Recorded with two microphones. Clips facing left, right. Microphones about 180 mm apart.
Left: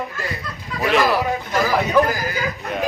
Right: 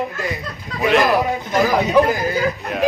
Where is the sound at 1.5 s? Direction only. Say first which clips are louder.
Right 3 dB; 20° right (ahead or behind).